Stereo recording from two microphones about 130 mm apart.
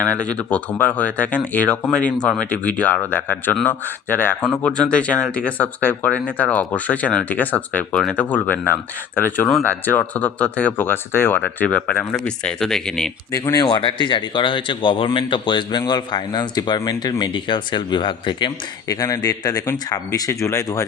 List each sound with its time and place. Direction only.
0.0 s speech: 10° left (ahead or behind)
13.3 s speech: 25° left (ahead or behind)